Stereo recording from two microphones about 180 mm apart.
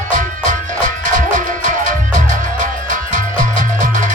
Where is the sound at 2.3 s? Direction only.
45° right (ahead or behind).